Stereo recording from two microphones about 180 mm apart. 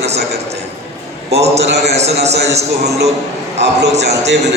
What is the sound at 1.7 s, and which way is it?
Speech, 65° right (ahead or behind).